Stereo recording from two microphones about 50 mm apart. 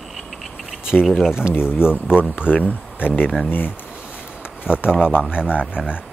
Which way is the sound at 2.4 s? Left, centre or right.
Left.